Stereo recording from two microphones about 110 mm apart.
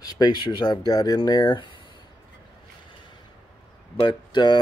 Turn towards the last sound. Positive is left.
turn(degrees=40)  # may be behind; listen again after turning